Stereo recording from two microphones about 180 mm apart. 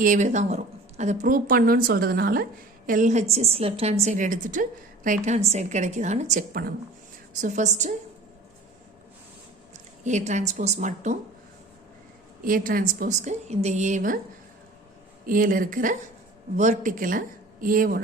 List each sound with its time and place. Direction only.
0.0 s a woman's voice: 45° right (ahead or behind)
6.5 s speech: 55° right (ahead or behind)
7.4 s a woman's voice: 40° right (ahead or behind)
10.0 s a woman's voice: 40° right (ahead or behind)
12.5 s a woman's voice: 50° right (ahead or behind)
15.3 s a woman's voice: 50° right (ahead or behind)